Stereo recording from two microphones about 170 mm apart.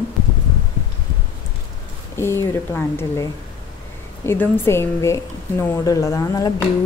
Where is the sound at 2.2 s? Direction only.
15° left (ahead or behind).